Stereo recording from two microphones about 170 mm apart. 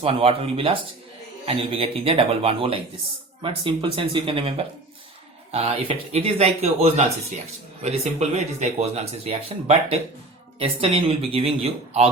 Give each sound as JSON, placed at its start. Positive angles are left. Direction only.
{"t": 0.0, "sound": "speech", "side_deg": -35}